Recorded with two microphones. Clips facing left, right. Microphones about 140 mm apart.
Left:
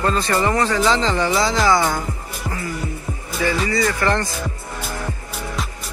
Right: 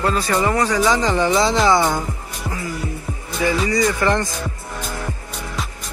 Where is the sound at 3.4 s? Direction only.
15° right (ahead or behind).